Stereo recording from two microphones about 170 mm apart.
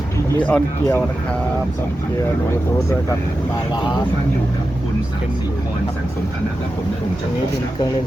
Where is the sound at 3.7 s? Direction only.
25° left (ahead or behind).